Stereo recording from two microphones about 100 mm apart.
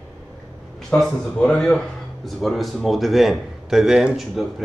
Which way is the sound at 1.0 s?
5° left (ahead or behind).